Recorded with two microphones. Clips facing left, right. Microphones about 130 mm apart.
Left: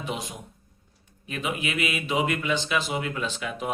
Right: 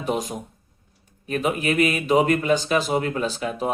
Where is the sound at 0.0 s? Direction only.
45° right (ahead or behind).